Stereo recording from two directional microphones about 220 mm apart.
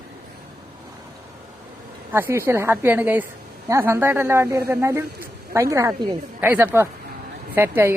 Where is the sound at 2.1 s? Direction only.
10° right (ahead or behind).